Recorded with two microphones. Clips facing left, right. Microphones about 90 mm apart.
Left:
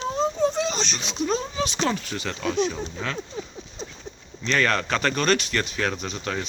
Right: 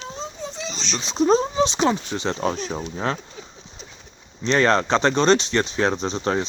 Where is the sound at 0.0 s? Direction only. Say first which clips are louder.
Left 10 dB; 50° left (ahead or behind).